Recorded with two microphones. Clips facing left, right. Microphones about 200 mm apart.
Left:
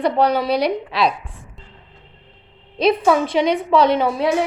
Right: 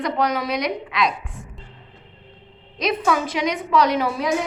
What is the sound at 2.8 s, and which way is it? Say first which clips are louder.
A woman's voice: left 6 dB; 30° left (ahead or behind).